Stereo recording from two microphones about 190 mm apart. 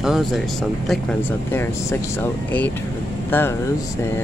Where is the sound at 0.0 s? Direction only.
Centre (ahead or behind).